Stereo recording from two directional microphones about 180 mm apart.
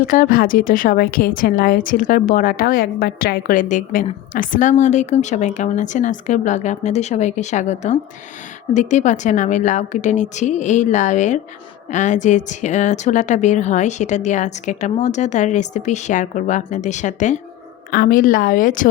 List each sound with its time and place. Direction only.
0.0 s a woman's voice: 50° left (ahead or behind)
17.9 s a woman's voice: 55° left (ahead or behind)